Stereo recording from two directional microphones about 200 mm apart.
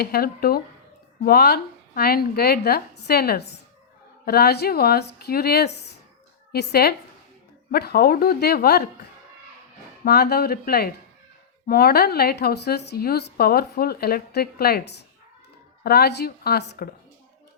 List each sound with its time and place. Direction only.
0.0 s a woman's voice: 50° left (ahead or behind)
10.0 s a woman's voice: 55° left (ahead or behind)